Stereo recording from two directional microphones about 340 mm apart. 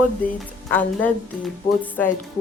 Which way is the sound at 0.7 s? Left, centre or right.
Centre.